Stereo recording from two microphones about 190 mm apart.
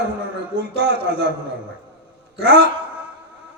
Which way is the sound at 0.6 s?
60° right (ahead or behind).